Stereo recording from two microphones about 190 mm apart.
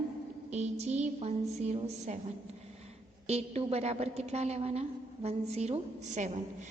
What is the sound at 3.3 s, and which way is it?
A woman's voice, 35° right (ahead or behind).